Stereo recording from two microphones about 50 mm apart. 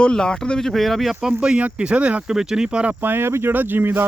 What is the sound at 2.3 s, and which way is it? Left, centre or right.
Speech, centre.